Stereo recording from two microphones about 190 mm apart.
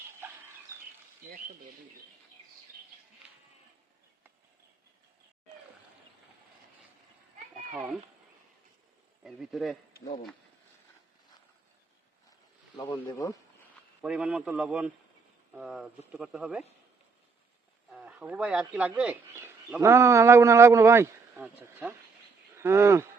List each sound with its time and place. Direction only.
7.5 s a sound: 5° right (ahead or behind)
9.2 s speech: centre (ahead or behind)
12.7 s speech: 20° left (ahead or behind)
14.0 s speech: 5° right (ahead or behind)
17.9 s speech: 5° right (ahead or behind)